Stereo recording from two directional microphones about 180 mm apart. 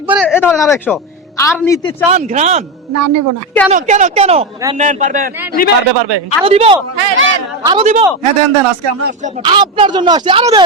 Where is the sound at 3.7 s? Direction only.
40° right (ahead or behind).